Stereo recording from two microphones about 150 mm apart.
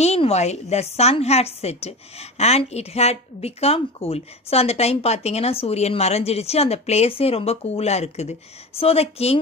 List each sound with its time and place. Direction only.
0.0 s a woman's voice: 45° left (ahead or behind)